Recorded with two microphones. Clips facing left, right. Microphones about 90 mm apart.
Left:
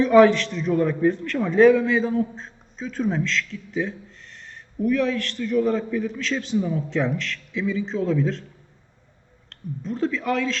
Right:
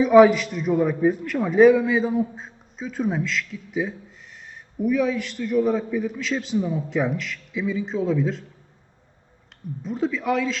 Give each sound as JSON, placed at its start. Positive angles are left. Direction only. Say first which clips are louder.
{"t": 0.0, "sound": "a man's voice", "louder": "right 1 dB", "side_deg": -10}
{"t": 9.5, "sound": "speech", "louder": "left 1 dB", "side_deg": -5}